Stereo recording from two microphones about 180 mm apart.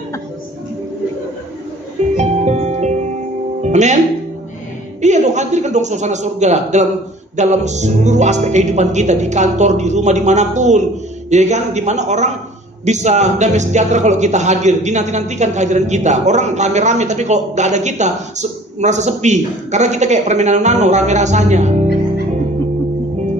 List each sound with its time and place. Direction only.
2.1 s music: 40° right (ahead or behind)
5.0 s speech: 40° right (ahead or behind)